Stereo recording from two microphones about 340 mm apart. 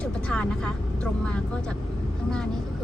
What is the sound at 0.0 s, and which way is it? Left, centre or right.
Speech, centre.